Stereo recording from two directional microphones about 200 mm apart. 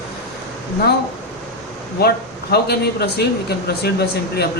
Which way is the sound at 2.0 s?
55° left (ahead or behind).